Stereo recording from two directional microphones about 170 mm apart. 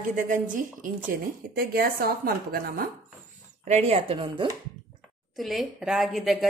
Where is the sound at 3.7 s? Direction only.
40° right (ahead or behind).